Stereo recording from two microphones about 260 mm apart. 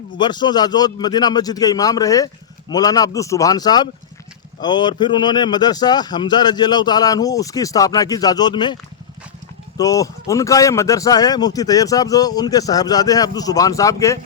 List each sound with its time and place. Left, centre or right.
0.2 s a man's voice: centre